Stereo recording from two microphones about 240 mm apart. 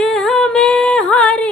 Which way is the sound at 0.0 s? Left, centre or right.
Centre.